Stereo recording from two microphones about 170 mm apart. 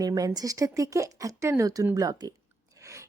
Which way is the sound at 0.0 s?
20° right (ahead or behind).